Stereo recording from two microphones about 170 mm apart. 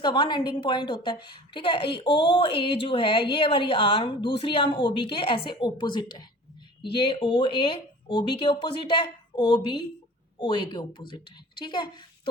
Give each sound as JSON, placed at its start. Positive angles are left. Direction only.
{"t": 0.0, "sound": "a woman's voice", "side_deg": 25}